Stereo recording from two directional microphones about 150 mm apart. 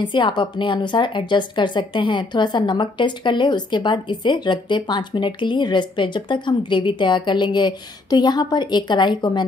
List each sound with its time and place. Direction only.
0.0 s a woman's voice: 30° left (ahead or behind)